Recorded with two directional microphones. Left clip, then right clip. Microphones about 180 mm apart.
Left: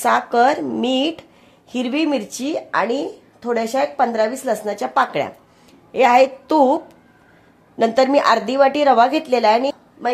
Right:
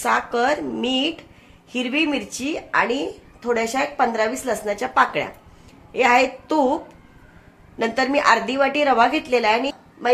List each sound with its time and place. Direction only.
0.0 s a woman's voice: 70° left (ahead or behind)